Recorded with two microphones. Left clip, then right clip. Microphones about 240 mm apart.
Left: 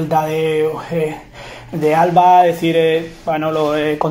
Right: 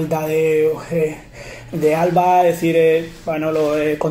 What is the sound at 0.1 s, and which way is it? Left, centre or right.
Speech, centre.